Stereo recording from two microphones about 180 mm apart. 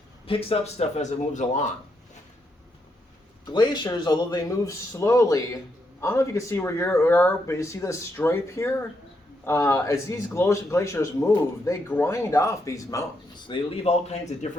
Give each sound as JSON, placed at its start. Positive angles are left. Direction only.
{"t": 0.3, "sound": "speech", "side_deg": 30}
{"t": 3.4, "sound": "a man's voice", "side_deg": 25}